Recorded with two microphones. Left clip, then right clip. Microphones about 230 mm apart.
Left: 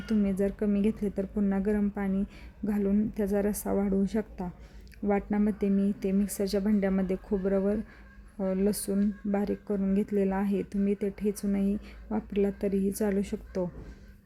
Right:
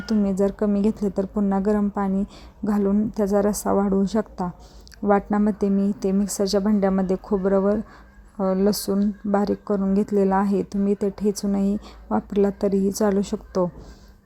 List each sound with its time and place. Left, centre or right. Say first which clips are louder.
0.0 s speech: right 7 dB; centre